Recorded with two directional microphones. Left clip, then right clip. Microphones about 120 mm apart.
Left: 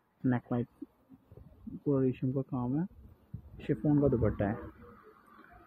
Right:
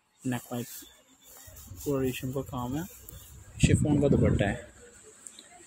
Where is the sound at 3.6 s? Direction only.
35° right (ahead or behind).